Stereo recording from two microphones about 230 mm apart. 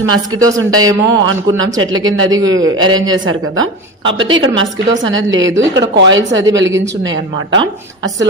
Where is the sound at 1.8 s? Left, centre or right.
Right.